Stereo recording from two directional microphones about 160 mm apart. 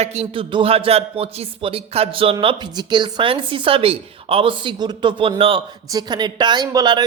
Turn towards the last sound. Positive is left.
turn(degrees=-25)  # may be behind; listen again after turning